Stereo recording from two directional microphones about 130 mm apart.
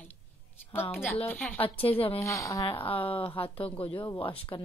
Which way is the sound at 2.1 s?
25° left (ahead or behind).